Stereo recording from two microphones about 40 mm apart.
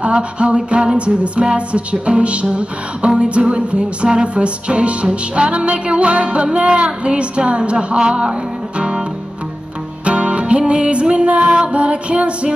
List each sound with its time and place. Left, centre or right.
0.0 s music: right
10.0 s music: right